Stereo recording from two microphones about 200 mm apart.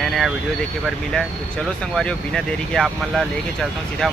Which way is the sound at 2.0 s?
5° left (ahead or behind).